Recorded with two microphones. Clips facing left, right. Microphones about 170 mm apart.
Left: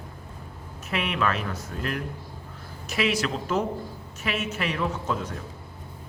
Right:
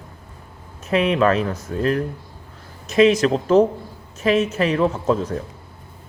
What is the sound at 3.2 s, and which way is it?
Speech, 35° right (ahead or behind).